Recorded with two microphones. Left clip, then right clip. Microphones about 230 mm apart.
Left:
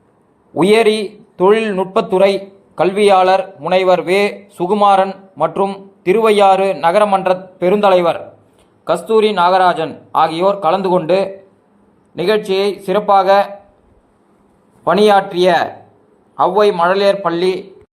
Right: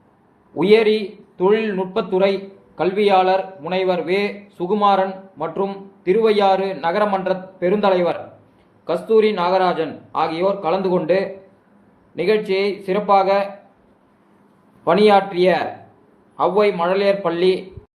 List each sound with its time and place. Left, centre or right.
0.5 s a man's voice: left
14.8 s a man's voice: left